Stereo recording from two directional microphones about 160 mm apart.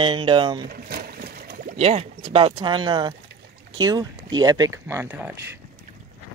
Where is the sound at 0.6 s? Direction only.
65° right (ahead or behind).